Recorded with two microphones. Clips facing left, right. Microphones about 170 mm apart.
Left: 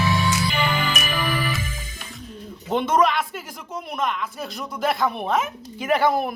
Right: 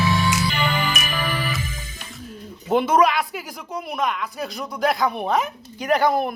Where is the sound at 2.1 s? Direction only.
5° right (ahead or behind).